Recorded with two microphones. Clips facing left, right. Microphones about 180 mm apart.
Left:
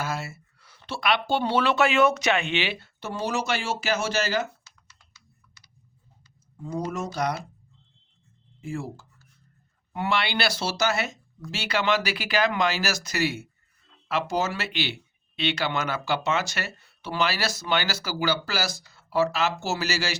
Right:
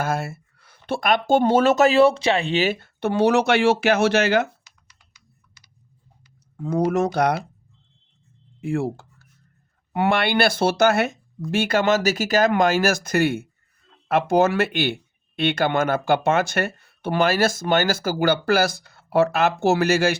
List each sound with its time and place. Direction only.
0.0 s speech: 55° right (ahead or behind)
4.6 s typing: 15° right (ahead or behind)
6.6 s speech: 70° right (ahead or behind)
8.6 s speech: 65° right (ahead or behind)